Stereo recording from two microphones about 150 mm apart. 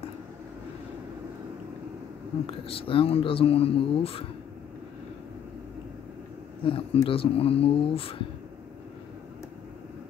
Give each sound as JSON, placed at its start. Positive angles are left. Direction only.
{"t": 2.4, "sound": "speech", "side_deg": 40}
{"t": 6.6, "sound": "speech", "side_deg": 35}